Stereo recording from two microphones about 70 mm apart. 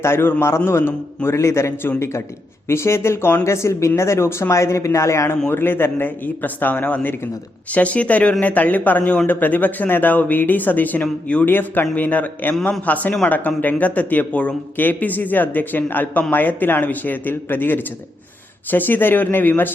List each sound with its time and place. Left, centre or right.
0.0 s a man's voice: left
5.5 s speech: left
11.4 s speech: left